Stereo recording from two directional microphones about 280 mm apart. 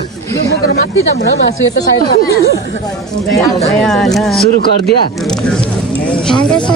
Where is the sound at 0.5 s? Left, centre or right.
Left.